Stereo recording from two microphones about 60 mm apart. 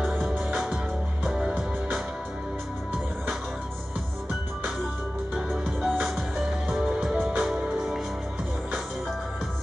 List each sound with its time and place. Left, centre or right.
0.0 s music: right
5.8 s music: centre